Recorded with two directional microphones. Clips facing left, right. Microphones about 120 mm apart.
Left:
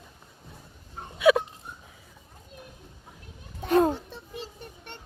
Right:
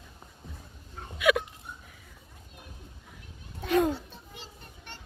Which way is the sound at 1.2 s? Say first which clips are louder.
Left 5 dB; 30° left (ahead or behind).